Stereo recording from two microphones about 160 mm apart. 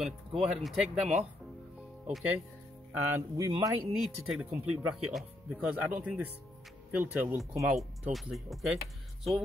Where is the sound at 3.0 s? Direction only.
15° right (ahead or behind).